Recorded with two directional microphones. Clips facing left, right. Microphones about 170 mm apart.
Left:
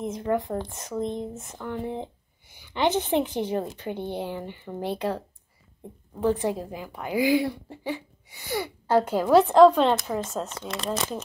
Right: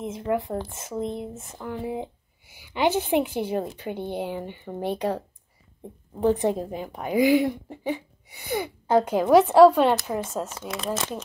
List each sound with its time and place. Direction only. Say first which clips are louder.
0.0 s speech: even; centre (ahead or behind)
6.2 s speech: right 3 dB; 20° right (ahead or behind); by 11.2 s centre (ahead or behind)